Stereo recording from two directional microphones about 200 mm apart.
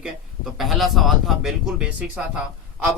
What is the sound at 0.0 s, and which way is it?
Speech, centre (ahead or behind).